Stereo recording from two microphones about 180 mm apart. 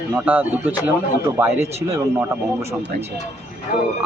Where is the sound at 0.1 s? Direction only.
10° right (ahead or behind).